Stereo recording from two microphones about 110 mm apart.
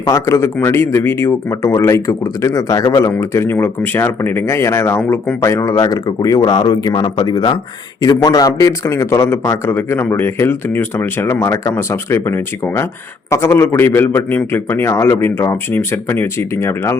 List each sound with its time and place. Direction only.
0.1 s speech: 25° left (ahead or behind)
3.1 s speech: 25° left (ahead or behind)